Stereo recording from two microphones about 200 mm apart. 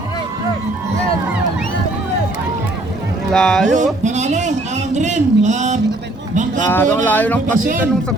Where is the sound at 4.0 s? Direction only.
35° right (ahead or behind).